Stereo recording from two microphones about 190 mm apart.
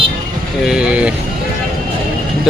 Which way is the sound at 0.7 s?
5° right (ahead or behind).